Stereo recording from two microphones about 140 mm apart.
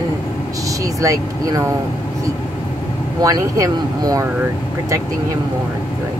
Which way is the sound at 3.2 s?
25° right (ahead or behind).